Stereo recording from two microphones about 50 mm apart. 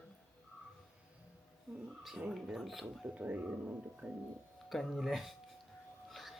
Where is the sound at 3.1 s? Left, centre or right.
Right.